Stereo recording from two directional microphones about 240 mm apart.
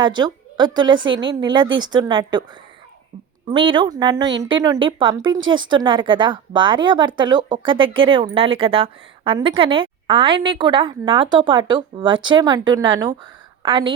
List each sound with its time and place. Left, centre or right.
0.0 s a woman's voice: centre
3.5 s a woman's voice: right